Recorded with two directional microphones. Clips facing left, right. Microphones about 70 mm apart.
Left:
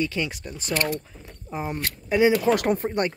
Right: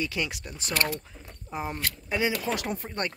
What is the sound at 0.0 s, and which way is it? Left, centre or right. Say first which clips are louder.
Speech: left 4 dB; centre.